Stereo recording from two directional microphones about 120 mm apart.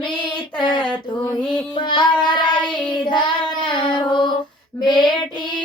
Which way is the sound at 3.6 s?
40° left (ahead or behind).